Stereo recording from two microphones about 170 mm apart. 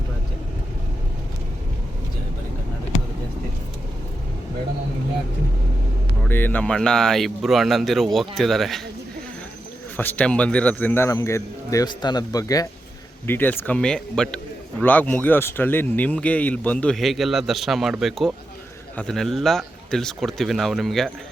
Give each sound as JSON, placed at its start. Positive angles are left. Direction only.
{"t": 6.2, "sound": "speech", "side_deg": 10}
{"t": 10.0, "sound": "a man's voice", "side_deg": 10}